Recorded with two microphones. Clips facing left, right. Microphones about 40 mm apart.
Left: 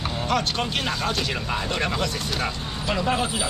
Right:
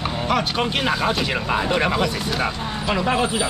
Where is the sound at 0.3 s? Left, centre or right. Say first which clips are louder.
Right 3 dB; centre.